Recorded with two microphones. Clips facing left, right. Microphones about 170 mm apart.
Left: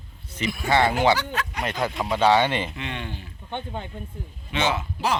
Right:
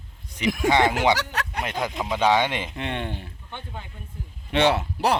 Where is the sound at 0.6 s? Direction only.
20° right (ahead or behind).